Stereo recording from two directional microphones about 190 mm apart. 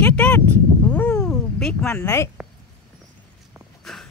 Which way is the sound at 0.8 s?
5° left (ahead or behind).